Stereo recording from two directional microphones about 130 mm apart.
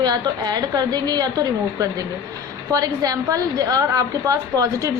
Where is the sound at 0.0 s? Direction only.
30° right (ahead or behind).